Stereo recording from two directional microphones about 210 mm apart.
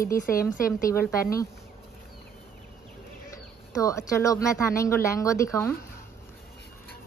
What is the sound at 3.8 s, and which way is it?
A woman's voice, 15° left (ahead or behind).